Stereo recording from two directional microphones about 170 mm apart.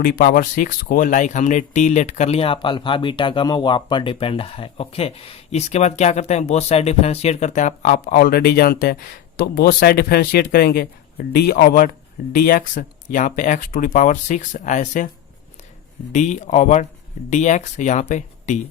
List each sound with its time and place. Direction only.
0.0 s speech: 60° left (ahead or behind)
16.1 s speech: 45° left (ahead or behind)